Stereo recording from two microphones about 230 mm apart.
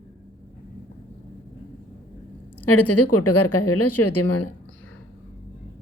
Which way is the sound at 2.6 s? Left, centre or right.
Left.